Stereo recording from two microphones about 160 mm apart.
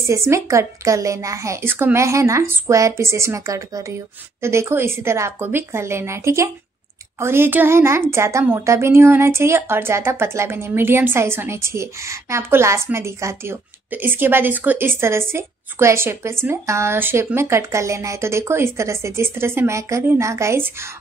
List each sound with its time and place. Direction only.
0.0 s a woman's voice: 15° right (ahead or behind)